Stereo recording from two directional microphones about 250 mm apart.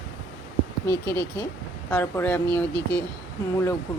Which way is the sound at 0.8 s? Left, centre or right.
Centre.